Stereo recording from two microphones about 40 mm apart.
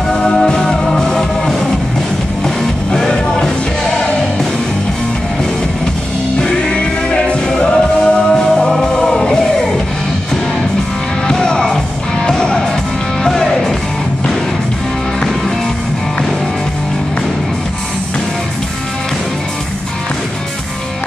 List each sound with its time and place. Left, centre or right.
0.1 s music: left
6.4 s music: left
11.2 s music: centre